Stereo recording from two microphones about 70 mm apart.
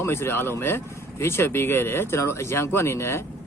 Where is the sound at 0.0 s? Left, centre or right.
Left.